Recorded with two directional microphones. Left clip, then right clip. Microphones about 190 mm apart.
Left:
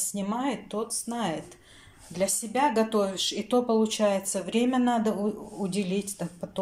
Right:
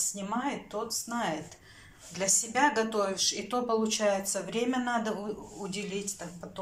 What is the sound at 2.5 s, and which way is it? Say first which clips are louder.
Speech: left 3 dB; 20° left (ahead or behind).